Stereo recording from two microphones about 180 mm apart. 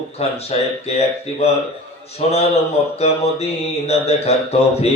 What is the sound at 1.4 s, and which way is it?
Mantra, 35° left (ahead or behind).